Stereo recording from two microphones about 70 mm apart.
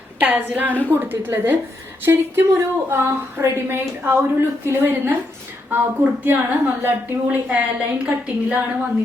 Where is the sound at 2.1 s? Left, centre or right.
Right.